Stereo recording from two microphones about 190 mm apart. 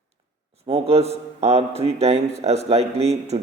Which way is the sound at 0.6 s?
30° right (ahead or behind).